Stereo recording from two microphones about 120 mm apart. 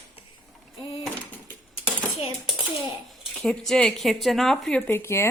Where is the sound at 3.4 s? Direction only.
Centre (ahead or behind).